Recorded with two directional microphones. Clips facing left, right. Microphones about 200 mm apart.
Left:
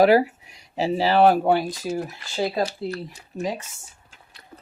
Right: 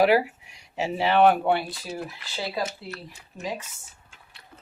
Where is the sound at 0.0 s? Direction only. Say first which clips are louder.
Left 4 dB; 40° left (ahead or behind).